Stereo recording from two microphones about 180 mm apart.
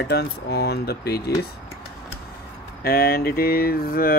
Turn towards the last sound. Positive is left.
turn(degrees=55)  # may be behind; listen again after turning